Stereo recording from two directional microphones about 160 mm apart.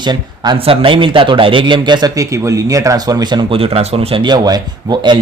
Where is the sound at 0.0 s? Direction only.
30° right (ahead or behind).